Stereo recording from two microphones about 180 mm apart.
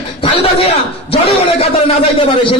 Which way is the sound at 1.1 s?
35° left (ahead or behind).